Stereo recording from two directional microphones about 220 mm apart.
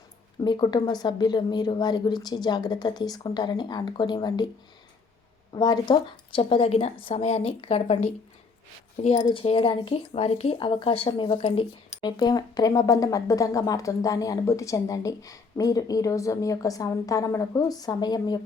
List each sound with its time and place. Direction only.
0.4 s a woman's voice: 20° left (ahead or behind)
5.5 s a woman's voice: 20° left (ahead or behind)